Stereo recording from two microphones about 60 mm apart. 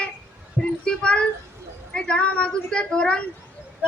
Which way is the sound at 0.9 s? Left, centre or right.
Centre.